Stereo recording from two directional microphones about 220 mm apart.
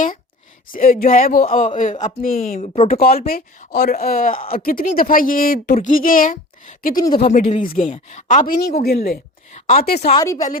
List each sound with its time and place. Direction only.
0.7 s a woman's voice: 40° left (ahead or behind)
7.8 s a woman's voice: 25° left (ahead or behind); by 10.1 s 45° left (ahead or behind)
10.1 s speech: 15° left (ahead or behind)